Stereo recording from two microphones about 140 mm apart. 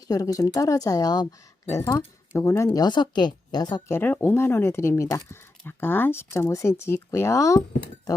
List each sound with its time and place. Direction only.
0.1 s speech: 25° left (ahead or behind)
1.8 s speech: 15° left (ahead or behind)
2.8 s a woman's voice: 30° left (ahead or behind)
3.8 s speech: 15° left (ahead or behind)